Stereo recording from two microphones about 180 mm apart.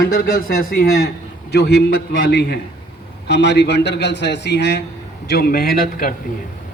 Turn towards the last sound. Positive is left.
turn(degrees=50)  # may be behind; listen again after turning